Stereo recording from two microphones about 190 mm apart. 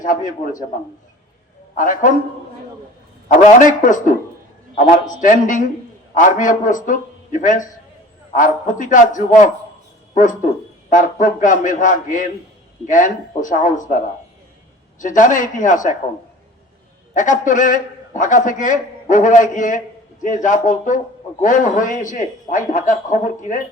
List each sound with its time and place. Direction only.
0.0 s a man's voice: 45° left (ahead or behind)
1.7 s a man's voice: 45° left (ahead or behind)
3.2 s a man's voice: 40° left (ahead or behind)
10.8 s a man's voice: 45° left (ahead or behind)
17.2 s a man's voice: 40° left (ahead or behind)